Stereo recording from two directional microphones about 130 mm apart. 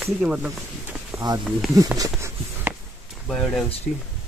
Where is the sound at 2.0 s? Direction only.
20° right (ahead or behind).